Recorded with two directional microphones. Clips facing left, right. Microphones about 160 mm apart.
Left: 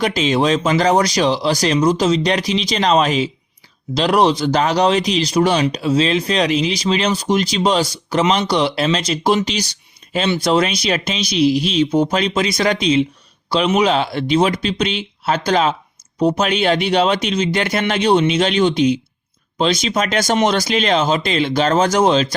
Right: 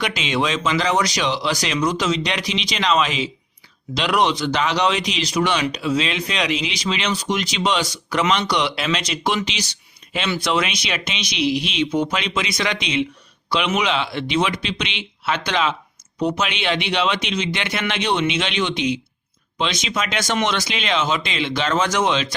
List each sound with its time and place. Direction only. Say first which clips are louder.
0.0 s speech: left 6 dB; 35° left (ahead or behind)